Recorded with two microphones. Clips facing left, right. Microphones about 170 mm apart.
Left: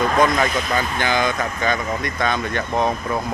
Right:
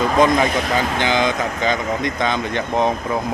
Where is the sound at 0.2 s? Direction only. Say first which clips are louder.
Right 5 dB; 20° right (ahead or behind).